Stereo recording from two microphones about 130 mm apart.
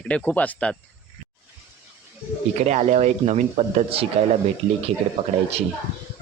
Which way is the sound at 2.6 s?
60° right (ahead or behind).